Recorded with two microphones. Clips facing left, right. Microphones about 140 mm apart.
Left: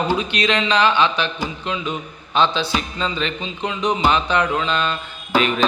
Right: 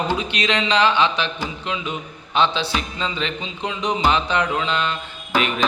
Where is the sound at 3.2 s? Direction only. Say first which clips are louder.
Left 2 dB; 25° right (ahead or behind).